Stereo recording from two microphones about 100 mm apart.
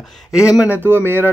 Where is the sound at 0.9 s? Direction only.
20° right (ahead or behind).